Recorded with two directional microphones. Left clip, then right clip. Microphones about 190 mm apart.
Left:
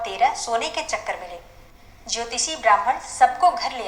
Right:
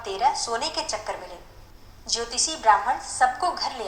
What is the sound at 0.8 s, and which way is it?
Speech, 25° left (ahead or behind).